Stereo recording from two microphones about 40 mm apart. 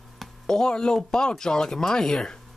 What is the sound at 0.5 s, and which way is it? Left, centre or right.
Speech, centre.